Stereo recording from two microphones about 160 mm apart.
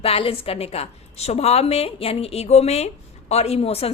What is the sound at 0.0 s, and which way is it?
A woman's voice, 35° left (ahead or behind).